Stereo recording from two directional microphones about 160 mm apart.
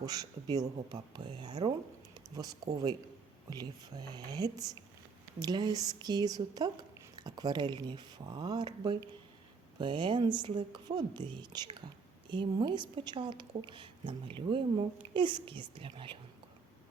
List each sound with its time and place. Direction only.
0.0 s speech: 25° right (ahead or behind)
2.1 s a sound: 20° right (ahead or behind)
3.5 s speech: 25° right (ahead or behind)